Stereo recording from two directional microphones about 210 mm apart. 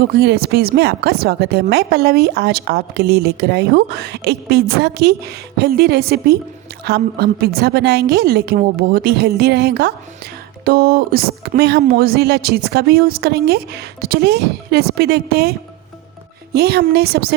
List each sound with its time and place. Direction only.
0.0 s speech: 50° right (ahead or behind)